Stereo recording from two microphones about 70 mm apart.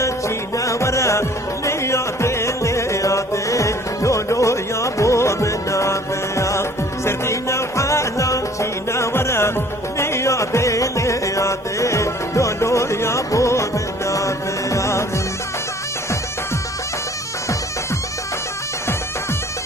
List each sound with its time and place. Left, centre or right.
0.5 s music: left